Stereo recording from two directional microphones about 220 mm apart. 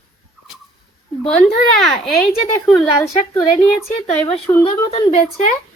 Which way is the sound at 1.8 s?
Centre (ahead or behind).